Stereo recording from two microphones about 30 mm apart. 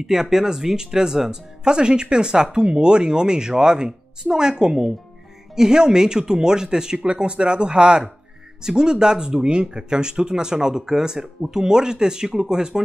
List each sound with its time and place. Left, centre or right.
0.0 s speech: centre
7.0 s speech: right